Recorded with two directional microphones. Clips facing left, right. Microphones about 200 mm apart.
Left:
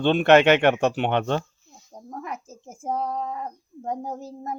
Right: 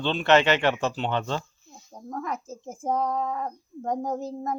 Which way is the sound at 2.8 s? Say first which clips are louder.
Right 1 dB; 5° left (ahead or behind).